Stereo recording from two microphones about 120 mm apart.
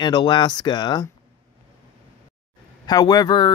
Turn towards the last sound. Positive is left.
turn(degrees=35)  # may be behind; listen again after turning